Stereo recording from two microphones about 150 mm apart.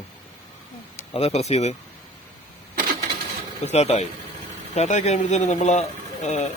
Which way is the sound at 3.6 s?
45° left (ahead or behind).